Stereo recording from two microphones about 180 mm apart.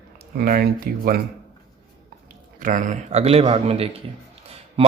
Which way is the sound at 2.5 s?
50° right (ahead or behind).